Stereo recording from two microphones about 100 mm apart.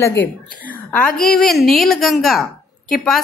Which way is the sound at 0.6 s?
15° left (ahead or behind).